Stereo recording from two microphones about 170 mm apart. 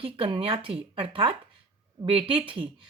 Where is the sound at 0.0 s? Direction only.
30° right (ahead or behind).